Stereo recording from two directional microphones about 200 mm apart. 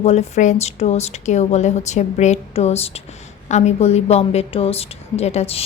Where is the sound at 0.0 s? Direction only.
35° left (ahead or behind).